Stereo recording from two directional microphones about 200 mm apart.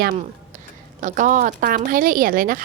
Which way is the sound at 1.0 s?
40° right (ahead or behind).